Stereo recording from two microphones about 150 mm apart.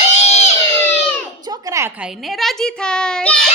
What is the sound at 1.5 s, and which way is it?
Speech, 20° right (ahead or behind).